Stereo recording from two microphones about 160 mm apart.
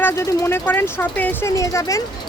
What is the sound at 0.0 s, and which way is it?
Speech, 15° left (ahead or behind).